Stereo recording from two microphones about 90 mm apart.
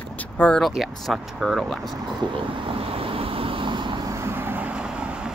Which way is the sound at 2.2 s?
80° right.